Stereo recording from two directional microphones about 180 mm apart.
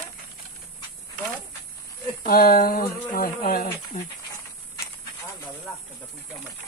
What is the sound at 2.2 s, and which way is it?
Speech, 55° left (ahead or behind).